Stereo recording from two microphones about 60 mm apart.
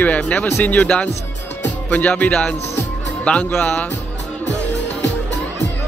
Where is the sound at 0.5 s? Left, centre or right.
Left.